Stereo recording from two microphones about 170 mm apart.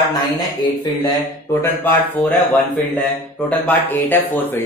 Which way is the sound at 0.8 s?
25° left (ahead or behind).